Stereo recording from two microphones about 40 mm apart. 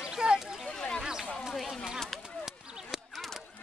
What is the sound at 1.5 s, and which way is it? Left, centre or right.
Speech, centre.